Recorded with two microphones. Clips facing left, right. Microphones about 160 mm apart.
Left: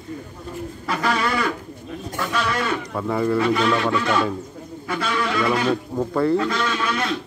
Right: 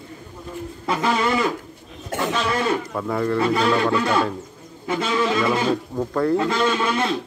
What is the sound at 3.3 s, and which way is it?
A man's voice, 30° right (ahead or behind).